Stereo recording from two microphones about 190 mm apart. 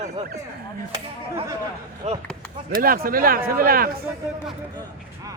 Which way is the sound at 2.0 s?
35° right (ahead or behind).